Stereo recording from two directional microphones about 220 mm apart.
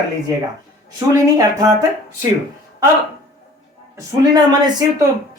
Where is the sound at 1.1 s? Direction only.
15° right (ahead or behind).